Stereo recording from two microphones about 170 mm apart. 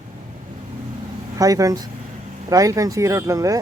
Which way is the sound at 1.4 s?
20° right (ahead or behind).